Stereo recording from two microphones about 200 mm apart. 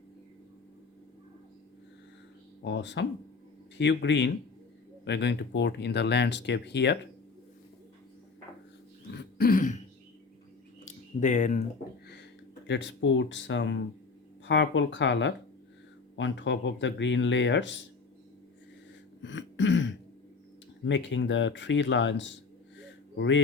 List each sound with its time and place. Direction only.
2.6 s speech: 65° left (ahead or behind)
9.1 s throat clearing: 45° left (ahead or behind)
10.8 s a sound: 40° left (ahead or behind)
12.6 s speech: 60° left (ahead or behind)
19.2 s throat clearing: 65° left (ahead or behind)
20.8 s a man's voice: 65° left (ahead or behind)